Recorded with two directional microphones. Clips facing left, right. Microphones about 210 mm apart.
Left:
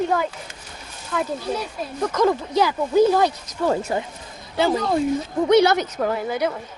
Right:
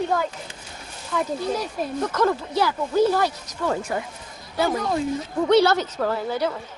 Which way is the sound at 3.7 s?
25° left (ahead or behind).